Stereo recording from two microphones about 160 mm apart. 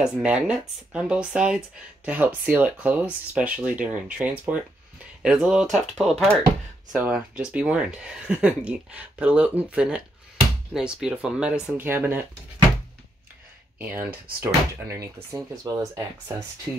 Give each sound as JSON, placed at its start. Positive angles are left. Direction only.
{"t": 0.0, "sound": "speech", "side_deg": -5}
{"t": 13.7, "sound": "speech", "side_deg": -10}